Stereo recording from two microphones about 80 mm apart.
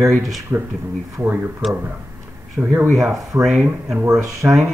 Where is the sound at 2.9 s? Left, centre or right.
Centre.